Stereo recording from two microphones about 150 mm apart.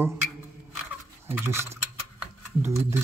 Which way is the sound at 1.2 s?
20° right (ahead or behind).